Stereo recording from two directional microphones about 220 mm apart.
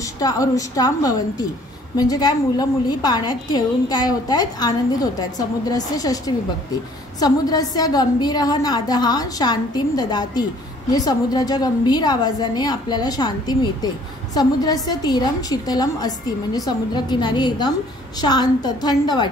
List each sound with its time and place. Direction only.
0.0 s a woman's voice: 15° left (ahead or behind)